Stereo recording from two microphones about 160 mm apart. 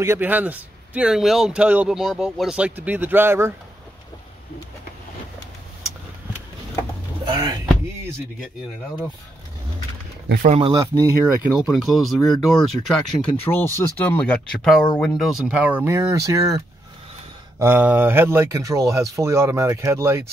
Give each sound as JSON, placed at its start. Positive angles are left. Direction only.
{"t": 0.0, "sound": "speech", "side_deg": -15}
{"t": 7.2, "sound": "speech", "side_deg": -25}
{"t": 10.4, "sound": "speech", "side_deg": -40}
{"t": 10.7, "sound": "speech", "side_deg": -20}
{"t": 11.5, "sound": "speech", "side_deg": -5}